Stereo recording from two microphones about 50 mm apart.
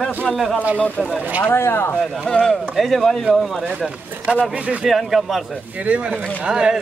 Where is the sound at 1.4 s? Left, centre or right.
Left.